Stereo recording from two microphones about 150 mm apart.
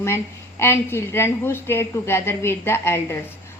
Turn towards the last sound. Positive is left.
turn(degrees=15)  # may be behind; listen again after turning